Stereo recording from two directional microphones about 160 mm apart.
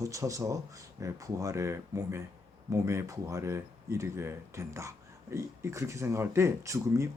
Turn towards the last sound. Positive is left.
turn(degrees=-20)  # may be behind; listen again after turning